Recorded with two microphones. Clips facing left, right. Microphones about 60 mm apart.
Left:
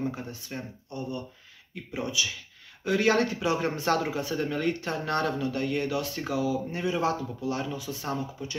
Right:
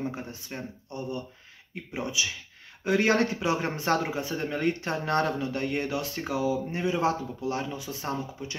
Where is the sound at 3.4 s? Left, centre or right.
Centre.